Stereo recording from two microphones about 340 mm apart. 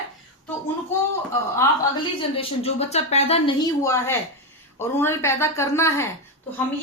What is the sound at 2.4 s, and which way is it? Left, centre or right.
Speech, centre.